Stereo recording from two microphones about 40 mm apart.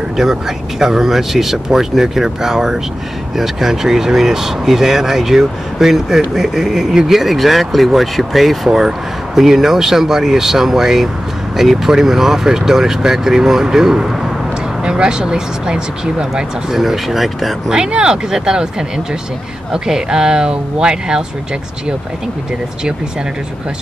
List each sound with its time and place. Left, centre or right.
0.2 s speech: centre
16.7 s speech: centre
17.6 s speech: right